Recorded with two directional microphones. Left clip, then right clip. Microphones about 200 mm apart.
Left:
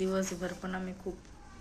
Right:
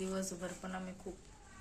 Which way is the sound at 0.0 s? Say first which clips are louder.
Left 8 dB; 10° right (ahead or behind).